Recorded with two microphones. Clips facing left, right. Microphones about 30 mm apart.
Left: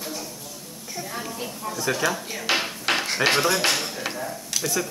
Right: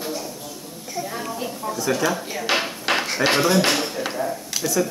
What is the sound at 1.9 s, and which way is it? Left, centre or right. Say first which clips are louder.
Speech: right 2 dB; centre.